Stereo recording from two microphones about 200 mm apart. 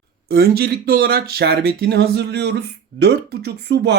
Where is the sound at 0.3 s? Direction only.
50° right (ahead or behind).